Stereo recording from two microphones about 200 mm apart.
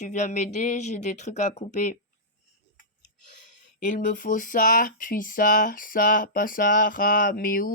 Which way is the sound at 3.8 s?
40° left (ahead or behind).